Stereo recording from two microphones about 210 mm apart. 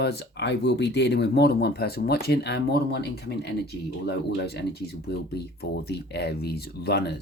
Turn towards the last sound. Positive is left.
turn(degrees=50)  # may be behind; listen again after turning